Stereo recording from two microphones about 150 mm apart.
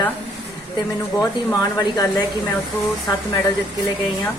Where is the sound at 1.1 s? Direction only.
20° left (ahead or behind).